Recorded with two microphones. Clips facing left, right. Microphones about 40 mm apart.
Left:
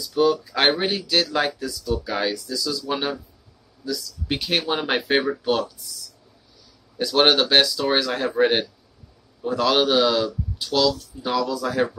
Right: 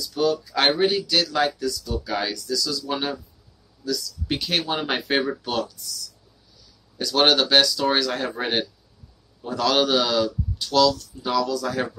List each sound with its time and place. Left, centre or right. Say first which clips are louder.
0.1 s a man's voice: left 3 dB; centre
1.6 s speech: left 1 dB; left
2.0 s a man's voice: left 1 dB; centre
7.0 s a man's voice: left 1 dB; centre